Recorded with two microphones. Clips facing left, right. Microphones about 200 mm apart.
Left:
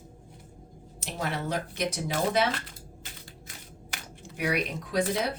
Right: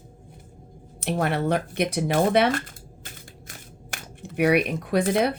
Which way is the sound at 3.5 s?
55° right (ahead or behind).